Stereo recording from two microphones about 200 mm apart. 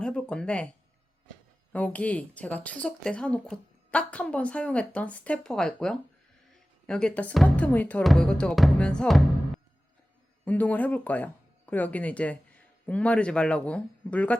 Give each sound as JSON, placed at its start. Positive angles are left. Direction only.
{"t": 0.0, "sound": "speech", "side_deg": 5}
{"t": 1.7, "sound": "speech", "side_deg": 5}
{"t": 10.4, "sound": "speech", "side_deg": 10}